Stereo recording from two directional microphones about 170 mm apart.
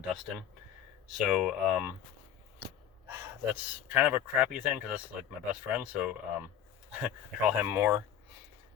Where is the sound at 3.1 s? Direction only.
15° right (ahead or behind).